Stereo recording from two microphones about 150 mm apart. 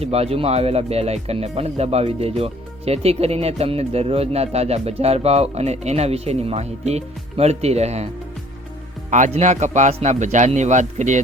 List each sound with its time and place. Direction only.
0.0 s speech: 45° right (ahead or behind)
9.0 s speech: 55° right (ahead or behind)